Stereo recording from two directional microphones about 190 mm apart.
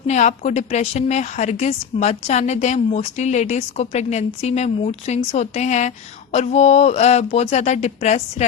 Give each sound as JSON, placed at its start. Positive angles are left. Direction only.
{"t": 0.1, "sound": "a woman's voice", "side_deg": 35}